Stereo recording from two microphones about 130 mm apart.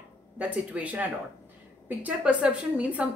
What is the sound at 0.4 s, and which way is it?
A woman's voice, 10° right (ahead or behind).